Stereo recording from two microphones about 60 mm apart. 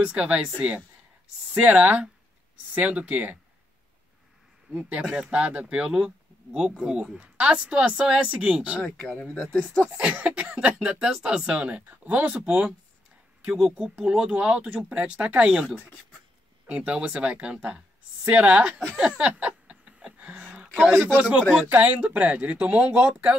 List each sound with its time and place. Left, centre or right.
0.0 s speech: centre
4.7 s speech: right
9.0 s speech: centre
9.9 s speech: centre
16.6 s speech: right
19.3 s a sound: centre
20.8 s speech: centre